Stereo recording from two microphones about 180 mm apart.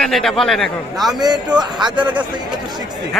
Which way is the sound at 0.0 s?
Centre (ahead or behind).